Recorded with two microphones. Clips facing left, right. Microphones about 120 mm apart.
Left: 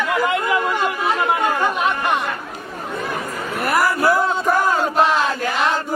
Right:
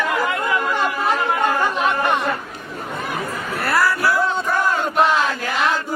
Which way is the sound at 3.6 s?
15° left (ahead or behind).